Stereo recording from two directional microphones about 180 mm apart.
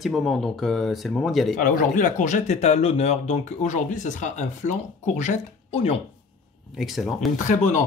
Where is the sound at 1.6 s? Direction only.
45° left (ahead or behind).